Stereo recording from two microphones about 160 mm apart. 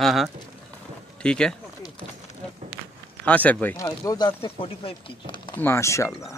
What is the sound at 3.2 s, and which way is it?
Speech, 10° left (ahead or behind).